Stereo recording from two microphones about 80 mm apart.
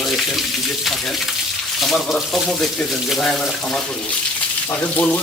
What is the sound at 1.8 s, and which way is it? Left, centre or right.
Speech, centre.